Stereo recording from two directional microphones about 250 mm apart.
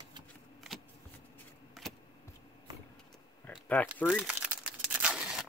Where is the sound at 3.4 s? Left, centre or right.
Centre.